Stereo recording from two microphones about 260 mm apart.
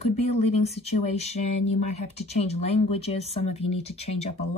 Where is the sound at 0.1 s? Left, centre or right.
Left.